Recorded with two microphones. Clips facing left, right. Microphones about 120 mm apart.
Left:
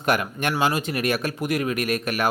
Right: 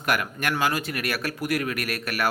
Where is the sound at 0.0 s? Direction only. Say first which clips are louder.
Left 3 dB; 25° left (ahead or behind).